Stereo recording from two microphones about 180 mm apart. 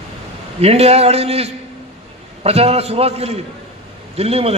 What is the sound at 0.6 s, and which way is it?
A man's voice, 35° right (ahead or behind).